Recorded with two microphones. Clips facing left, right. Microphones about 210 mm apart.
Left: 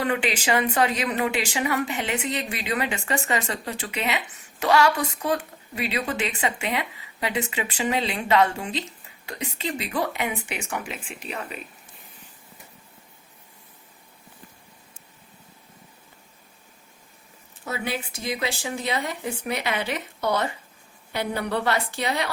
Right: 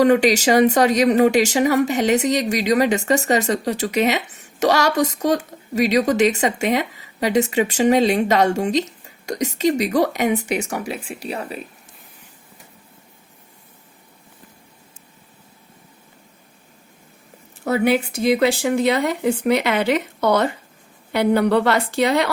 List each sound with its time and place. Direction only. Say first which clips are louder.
0.0 s speech: right 11 dB; 40° right (ahead or behind)
17.7 s speech: right 12 dB; 65° right (ahead or behind)